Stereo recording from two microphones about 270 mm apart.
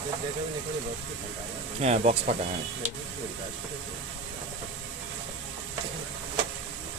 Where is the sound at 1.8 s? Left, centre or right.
Right.